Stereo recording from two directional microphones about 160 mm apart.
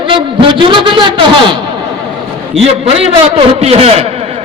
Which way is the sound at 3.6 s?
40° right (ahead or behind).